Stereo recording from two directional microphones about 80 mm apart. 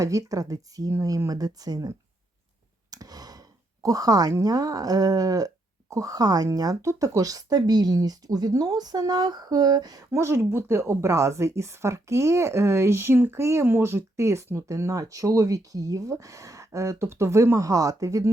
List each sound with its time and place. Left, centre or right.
0.0 s speech: right
2.9 s sigh: right
3.8 s speech: right
10.1 s speech: right